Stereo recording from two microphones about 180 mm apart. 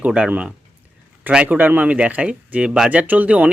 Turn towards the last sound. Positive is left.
turn(degrees=-10)  # may be behind; listen again after turning